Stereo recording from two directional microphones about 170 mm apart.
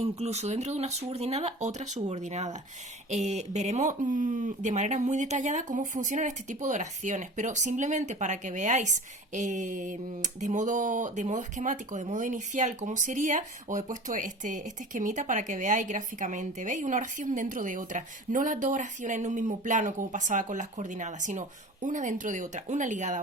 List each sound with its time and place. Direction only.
0.0 s speech: 40° right (ahead or behind)